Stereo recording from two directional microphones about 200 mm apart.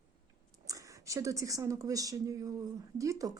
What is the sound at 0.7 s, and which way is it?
Speech, 15° right (ahead or behind).